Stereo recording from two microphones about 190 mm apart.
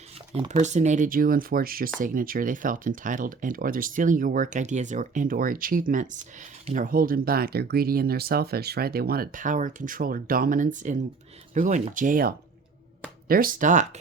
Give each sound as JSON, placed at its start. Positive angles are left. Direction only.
{"t": 0.6, "sound": "speech", "side_deg": -40}